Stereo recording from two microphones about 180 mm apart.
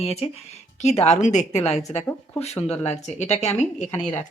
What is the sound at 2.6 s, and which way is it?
Speech, 10° left (ahead or behind).